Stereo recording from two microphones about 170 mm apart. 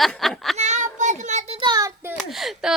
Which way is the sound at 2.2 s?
Centre (ahead or behind).